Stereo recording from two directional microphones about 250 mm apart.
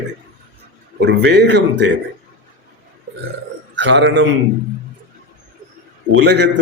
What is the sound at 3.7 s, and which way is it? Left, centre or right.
Speech, right.